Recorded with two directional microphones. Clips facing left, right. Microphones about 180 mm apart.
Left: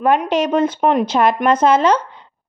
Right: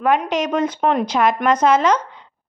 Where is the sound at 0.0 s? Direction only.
30° left (ahead or behind).